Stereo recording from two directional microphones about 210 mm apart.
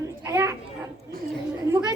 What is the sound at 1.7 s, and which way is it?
Speech, 15° right (ahead or behind).